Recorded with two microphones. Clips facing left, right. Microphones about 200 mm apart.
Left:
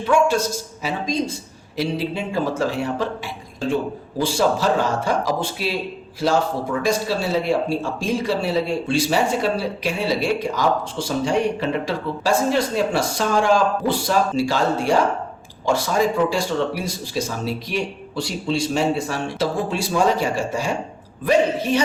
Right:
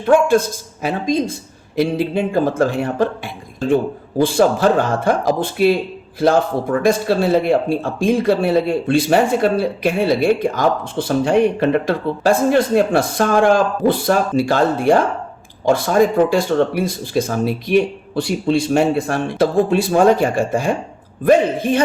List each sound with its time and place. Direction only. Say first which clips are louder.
0.0 s speech: right 5 dB; 55° right (ahead or behind)
4.2 s speech: right 6 dB; 55° right (ahead or behind)